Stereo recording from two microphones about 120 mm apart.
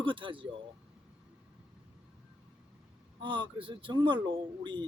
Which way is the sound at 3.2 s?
45° right (ahead or behind).